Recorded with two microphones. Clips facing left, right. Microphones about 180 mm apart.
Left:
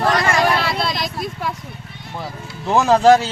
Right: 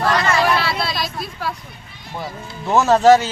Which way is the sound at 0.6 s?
20° left (ahead or behind).